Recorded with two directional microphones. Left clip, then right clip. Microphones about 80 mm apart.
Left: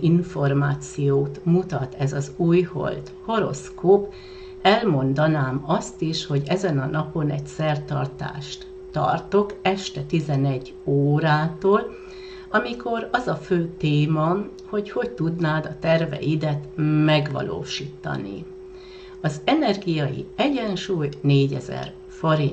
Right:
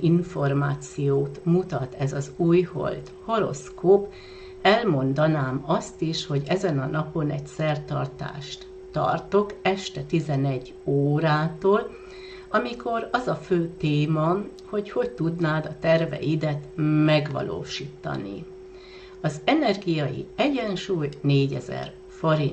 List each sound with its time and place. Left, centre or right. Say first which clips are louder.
0.2 s speech: left 2 dB; right